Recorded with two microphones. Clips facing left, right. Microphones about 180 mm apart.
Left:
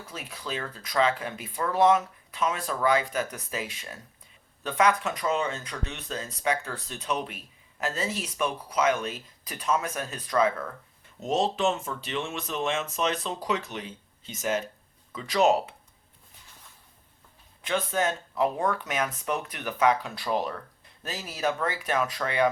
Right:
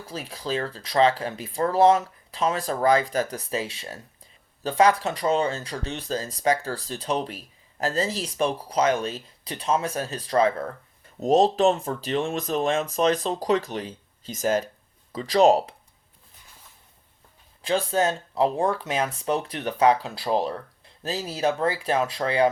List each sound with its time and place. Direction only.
0.1 s speech: 35° right (ahead or behind)
17.6 s speech: 30° right (ahead or behind)